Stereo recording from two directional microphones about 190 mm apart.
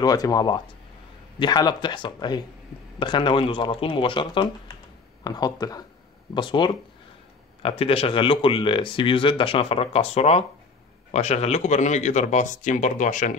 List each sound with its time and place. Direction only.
0.0 s speech: 20° left (ahead or behind); by 13.4 s 40° left (ahead or behind)